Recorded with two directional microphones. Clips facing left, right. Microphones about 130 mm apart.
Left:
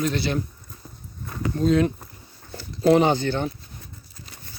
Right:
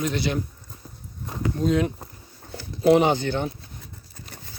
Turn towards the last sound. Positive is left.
turn(degrees=-15)  # may be behind; listen again after turning